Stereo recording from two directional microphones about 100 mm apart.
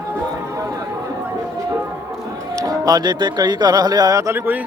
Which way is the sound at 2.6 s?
35° right (ahead or behind).